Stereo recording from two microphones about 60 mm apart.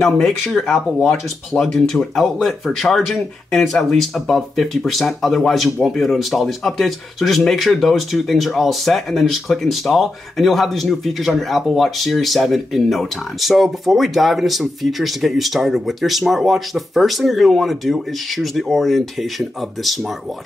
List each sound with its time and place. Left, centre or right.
0.0 s speech: centre